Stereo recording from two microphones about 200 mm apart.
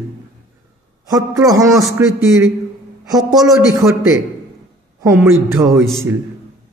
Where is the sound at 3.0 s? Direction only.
20° right (ahead or behind).